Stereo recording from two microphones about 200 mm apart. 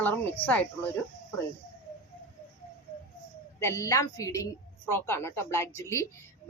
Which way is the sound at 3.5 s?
15° left (ahead or behind).